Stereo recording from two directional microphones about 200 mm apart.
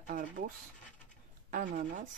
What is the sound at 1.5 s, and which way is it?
Speech, 40° right (ahead or behind).